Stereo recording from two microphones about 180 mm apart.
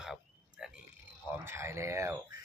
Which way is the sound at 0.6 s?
5° right (ahead or behind).